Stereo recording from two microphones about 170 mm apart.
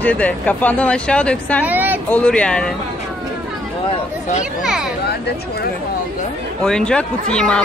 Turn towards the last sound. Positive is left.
turn(degrees=5)  # may be behind; listen again after turning